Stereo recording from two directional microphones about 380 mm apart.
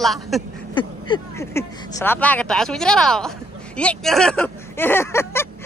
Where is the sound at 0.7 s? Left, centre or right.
Centre.